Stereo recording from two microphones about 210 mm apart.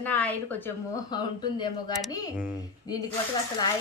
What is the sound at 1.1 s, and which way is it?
Speech, 20° left (ahead or behind).